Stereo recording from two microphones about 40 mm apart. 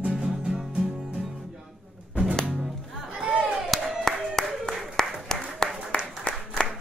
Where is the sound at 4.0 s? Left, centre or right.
Centre.